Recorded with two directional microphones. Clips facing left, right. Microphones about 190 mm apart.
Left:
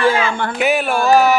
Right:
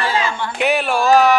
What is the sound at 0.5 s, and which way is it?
Speech, centre (ahead or behind).